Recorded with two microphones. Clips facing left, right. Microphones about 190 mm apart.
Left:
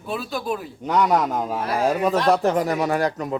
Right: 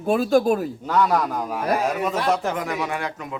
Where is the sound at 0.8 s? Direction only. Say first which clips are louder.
Left 6 dB; 20° left (ahead or behind).